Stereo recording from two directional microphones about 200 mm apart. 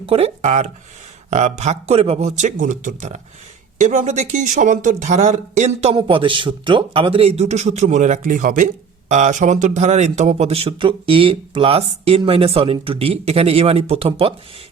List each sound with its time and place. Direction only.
0.0 s speech: 30° right (ahead or behind)